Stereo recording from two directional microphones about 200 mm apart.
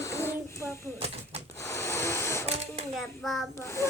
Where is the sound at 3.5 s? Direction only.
15° left (ahead or behind).